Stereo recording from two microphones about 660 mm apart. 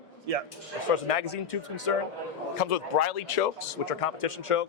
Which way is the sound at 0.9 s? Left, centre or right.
Left.